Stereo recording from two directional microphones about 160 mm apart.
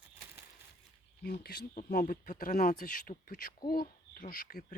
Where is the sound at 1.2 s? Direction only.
80° left.